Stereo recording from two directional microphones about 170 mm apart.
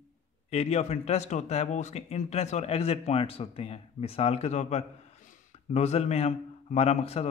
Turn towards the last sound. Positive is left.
turn(degrees=35)  # may be behind; listen again after turning